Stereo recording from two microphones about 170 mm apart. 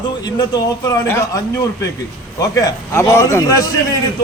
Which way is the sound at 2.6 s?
15° left (ahead or behind).